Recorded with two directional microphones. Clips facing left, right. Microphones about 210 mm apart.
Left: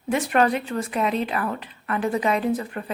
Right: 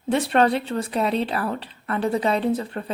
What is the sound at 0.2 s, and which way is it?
A woman's voice, 30° right (ahead or behind).